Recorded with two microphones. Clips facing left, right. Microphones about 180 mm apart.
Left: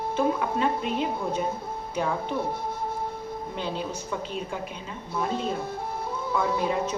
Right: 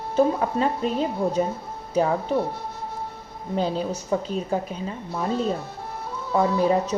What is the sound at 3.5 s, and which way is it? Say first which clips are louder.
A woman's voice: right 9 dB; 40° right (ahead or behind).